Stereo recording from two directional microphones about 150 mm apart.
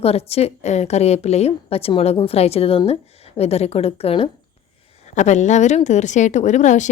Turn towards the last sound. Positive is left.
turn(degrees=55)  # may be behind; listen again after turning